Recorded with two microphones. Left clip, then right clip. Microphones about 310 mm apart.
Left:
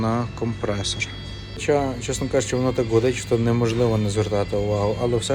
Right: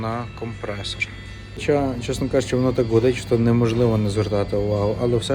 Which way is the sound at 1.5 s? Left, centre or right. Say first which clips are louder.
Even; centre.